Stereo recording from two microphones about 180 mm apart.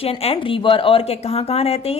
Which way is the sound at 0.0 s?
35° left (ahead or behind).